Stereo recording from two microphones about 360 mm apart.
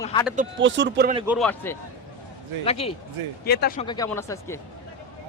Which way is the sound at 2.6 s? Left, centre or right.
Centre.